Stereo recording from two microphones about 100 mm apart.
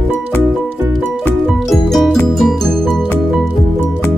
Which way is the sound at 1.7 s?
Centre (ahead or behind).